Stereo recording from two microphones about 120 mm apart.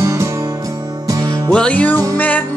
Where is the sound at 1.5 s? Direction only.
10° left (ahead or behind).